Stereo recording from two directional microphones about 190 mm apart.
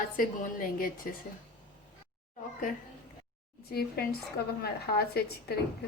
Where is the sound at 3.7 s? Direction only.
55° left (ahead or behind).